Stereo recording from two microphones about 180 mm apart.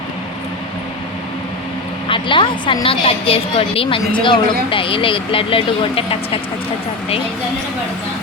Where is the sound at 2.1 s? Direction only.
25° left (ahead or behind).